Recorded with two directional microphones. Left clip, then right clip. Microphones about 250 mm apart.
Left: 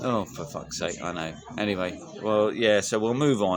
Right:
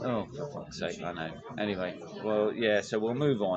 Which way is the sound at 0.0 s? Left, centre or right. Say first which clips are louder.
Left 5 dB; left.